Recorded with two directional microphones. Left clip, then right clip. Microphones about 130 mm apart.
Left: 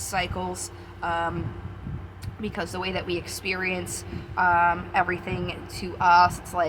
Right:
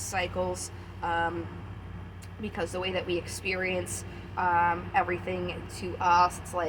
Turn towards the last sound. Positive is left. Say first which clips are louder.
# left 5 dB
turn(degrees=35)  # may be behind; listen again after turning